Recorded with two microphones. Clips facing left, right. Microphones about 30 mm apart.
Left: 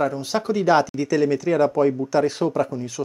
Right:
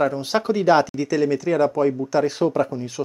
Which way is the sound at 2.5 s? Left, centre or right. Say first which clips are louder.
Right 1 dB; centre.